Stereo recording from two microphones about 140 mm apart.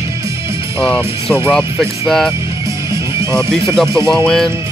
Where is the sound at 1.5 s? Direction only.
Centre (ahead or behind).